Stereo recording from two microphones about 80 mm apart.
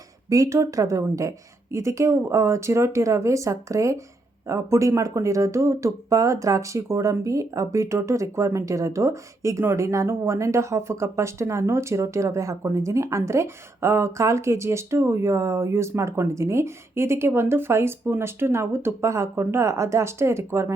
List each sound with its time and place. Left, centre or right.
0.3 s speech: right